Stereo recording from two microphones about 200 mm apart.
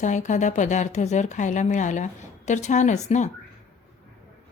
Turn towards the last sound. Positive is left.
turn(degrees=35)  # may be behind; listen again after turning